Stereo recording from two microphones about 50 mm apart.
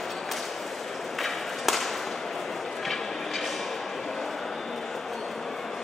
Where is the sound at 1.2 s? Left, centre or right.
Centre.